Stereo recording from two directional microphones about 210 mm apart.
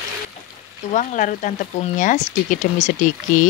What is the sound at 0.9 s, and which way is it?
Speech, 35° left (ahead or behind).